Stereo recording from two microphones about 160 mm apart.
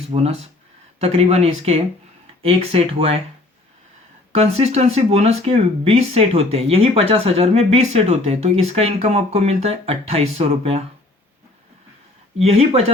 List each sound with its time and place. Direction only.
0.1 s speech: 40° right (ahead or behind)
4.4 s speech: 40° right (ahead or behind)
12.4 s speech: 40° right (ahead or behind)